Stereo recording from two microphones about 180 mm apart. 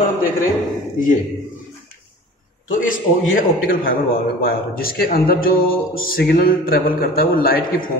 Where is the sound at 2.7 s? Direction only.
90° left.